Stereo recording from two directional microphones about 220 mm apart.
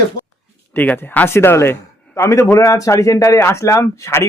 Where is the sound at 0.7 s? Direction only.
10° left (ahead or behind).